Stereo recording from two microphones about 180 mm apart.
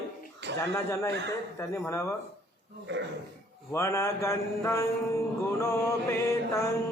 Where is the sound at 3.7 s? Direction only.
15° left (ahead or behind).